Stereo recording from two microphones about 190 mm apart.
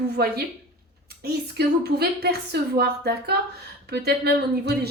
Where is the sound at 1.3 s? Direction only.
60° right (ahead or behind).